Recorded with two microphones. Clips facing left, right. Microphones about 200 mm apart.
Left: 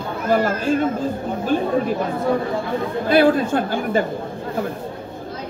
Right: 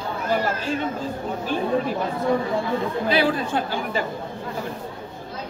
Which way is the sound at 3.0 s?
50° left (ahead or behind).